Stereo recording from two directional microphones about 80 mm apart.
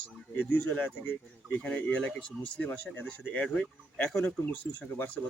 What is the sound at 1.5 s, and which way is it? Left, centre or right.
Speech, centre.